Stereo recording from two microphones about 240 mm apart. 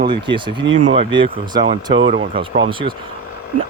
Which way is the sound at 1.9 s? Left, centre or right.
Right.